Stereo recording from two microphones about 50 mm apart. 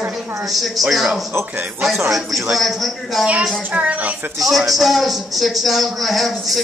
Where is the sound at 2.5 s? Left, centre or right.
Centre.